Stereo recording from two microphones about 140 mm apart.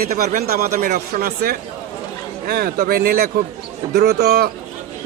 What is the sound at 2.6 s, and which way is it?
Speech, 90° right.